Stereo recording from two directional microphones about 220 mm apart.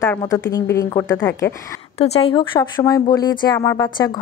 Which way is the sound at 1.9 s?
25° left (ahead or behind).